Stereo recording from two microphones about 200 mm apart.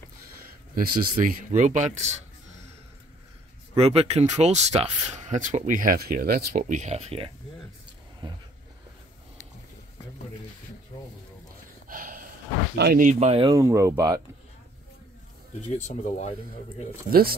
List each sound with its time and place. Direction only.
0.7 s speech: 40° right (ahead or behind)
3.7 s speech: 30° right (ahead or behind)
8.2 s a sound: 25° right (ahead or behind)
11.9 s snort: 45° right (ahead or behind)
12.7 s speech: 50° right (ahead or behind)
13.1 s speech: 35° right (ahead or behind)
13.5 s speech: 15° right (ahead or behind)
15.7 s speech: 35° left (ahead or behind)